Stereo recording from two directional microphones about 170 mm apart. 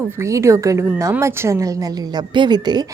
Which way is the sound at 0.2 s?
15° right (ahead or behind).